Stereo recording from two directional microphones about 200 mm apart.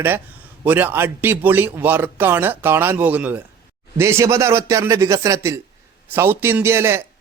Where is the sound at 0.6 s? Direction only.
10° right (ahead or behind).